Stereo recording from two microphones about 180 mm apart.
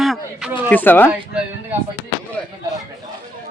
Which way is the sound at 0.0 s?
Centre (ahead or behind).